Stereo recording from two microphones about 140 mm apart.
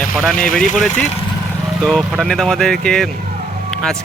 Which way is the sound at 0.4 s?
70° left (ahead or behind).